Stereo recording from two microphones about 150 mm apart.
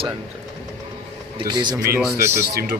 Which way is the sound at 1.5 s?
30° right (ahead or behind).